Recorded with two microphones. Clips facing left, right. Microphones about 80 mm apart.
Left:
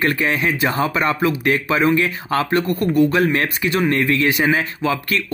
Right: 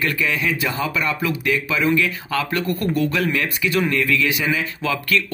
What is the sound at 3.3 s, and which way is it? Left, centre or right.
Speech, left.